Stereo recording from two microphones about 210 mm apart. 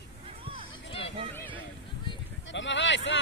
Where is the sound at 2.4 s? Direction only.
60° left (ahead or behind).